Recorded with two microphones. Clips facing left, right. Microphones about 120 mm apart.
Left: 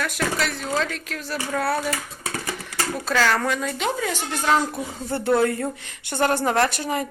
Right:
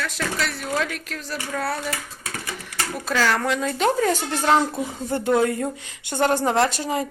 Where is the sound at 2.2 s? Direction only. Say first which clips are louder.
Left 3 dB; 30° left (ahead or behind).